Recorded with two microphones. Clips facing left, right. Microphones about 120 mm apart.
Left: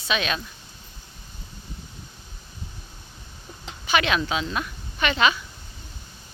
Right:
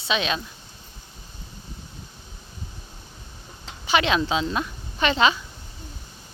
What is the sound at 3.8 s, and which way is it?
Speech, 25° right (ahead or behind).